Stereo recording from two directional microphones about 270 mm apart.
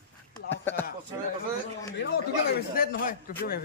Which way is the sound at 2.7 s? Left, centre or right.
Left.